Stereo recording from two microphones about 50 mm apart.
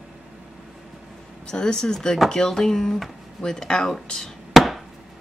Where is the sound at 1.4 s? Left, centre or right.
Centre.